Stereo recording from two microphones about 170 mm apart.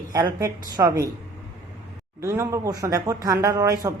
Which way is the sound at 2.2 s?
15° right (ahead or behind).